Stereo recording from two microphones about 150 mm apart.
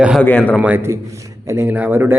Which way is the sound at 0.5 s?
10° right (ahead or behind).